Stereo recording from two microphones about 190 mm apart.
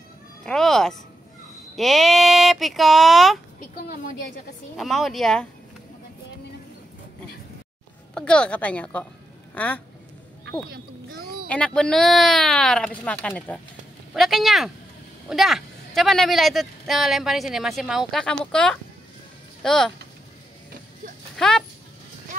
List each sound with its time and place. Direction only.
0.4 s speech: 5° left (ahead or behind)
3.5 s a woman's voice: 45° left (ahead or behind)
4.7 s speech: centre (ahead or behind)
8.1 s speech: 5° left (ahead or behind)
10.7 s a sound: 55° right (ahead or behind)
11.4 s speech: 5° left (ahead or behind)
21.4 s speech: 5° left (ahead or behind)